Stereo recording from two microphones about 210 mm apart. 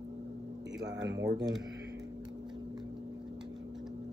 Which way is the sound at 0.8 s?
20° right (ahead or behind).